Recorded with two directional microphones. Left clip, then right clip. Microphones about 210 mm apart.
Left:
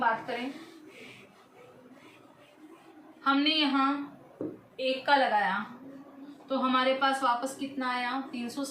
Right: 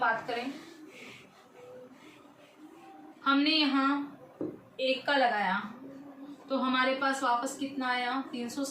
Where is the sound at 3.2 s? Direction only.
25° left (ahead or behind).